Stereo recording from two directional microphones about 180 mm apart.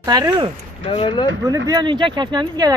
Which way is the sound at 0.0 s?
20° right (ahead or behind).